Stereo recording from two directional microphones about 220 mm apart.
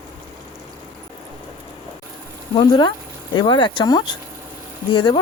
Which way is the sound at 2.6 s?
20° left (ahead or behind).